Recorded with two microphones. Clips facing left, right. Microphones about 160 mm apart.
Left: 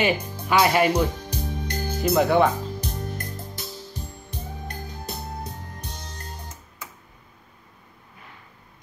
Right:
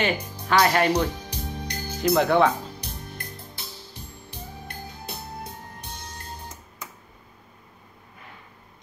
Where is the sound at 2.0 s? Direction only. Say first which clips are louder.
Even; 5° left (ahead or behind).